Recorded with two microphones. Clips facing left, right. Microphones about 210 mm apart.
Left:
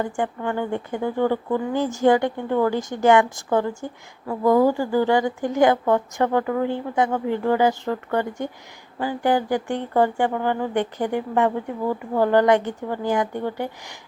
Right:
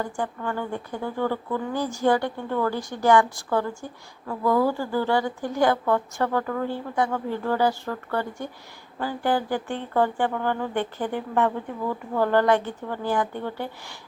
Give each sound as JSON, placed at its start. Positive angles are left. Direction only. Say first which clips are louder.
{"t": 0.0, "sound": "a woman's voice", "louder": "left 4 dB", "side_deg": 20}